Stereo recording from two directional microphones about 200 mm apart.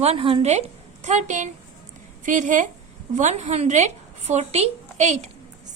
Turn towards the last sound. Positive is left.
turn(degrees=-35)  # may be behind; listen again after turning